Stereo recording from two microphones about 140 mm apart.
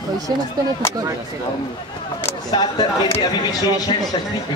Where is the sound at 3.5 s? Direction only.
25° left (ahead or behind).